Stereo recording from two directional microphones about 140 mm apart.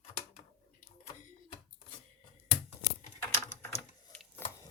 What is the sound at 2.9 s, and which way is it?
Typing, 20° left (ahead or behind).